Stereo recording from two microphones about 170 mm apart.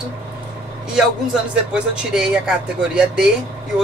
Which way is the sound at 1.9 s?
5° right (ahead or behind).